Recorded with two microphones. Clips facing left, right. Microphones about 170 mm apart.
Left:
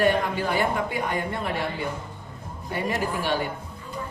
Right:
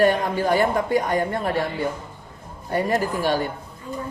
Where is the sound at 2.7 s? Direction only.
40° right (ahead or behind).